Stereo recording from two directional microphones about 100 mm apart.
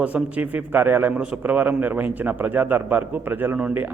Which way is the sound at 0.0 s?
15° right (ahead or behind).